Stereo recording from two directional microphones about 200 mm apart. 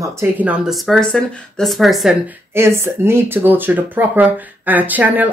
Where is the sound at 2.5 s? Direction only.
15° right (ahead or behind).